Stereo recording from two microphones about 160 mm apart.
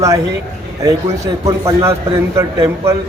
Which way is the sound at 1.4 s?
20° right (ahead or behind).